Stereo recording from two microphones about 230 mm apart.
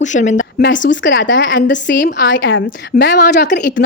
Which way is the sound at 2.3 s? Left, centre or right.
Left.